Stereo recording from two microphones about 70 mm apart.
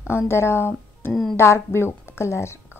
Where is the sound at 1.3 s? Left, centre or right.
Left.